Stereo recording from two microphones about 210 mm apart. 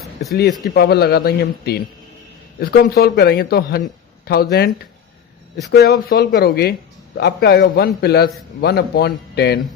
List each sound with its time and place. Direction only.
0.0 s a sound: centre (ahead or behind)
0.7 s speech: 50° left (ahead or behind)
5.7 s speech: 45° left (ahead or behind)